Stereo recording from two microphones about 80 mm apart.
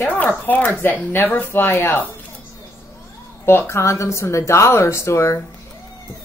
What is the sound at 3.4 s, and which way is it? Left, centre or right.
Speech, left.